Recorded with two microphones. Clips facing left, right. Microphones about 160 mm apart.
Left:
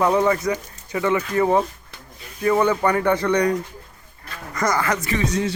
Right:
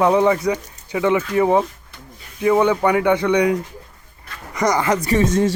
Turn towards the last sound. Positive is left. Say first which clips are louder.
# right 6 dB
turn(degrees=-50)  # may be behind; listen again after turning